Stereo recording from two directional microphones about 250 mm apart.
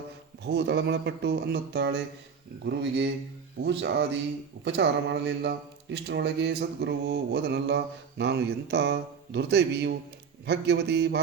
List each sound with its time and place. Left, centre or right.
0.4 s speech: right